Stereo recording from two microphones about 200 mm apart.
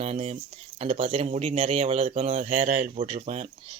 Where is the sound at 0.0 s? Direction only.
35° right (ahead or behind).